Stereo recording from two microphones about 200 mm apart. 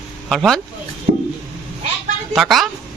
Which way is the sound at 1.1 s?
45° right (ahead or behind).